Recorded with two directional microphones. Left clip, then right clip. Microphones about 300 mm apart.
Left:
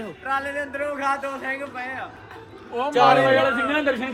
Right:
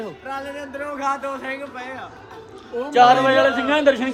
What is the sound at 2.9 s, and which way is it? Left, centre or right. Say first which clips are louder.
A man's voice: right 3 dB; right.